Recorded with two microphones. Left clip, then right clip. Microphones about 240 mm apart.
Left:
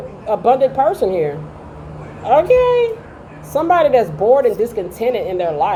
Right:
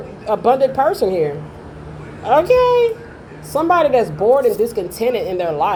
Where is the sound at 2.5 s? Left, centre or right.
Right.